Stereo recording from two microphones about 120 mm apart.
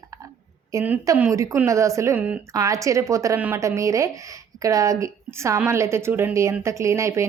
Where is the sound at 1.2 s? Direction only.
25° right (ahead or behind).